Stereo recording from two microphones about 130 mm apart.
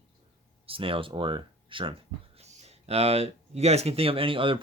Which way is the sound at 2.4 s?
55° right (ahead or behind).